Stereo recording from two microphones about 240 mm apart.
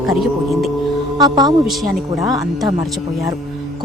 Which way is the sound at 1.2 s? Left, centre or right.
Centre.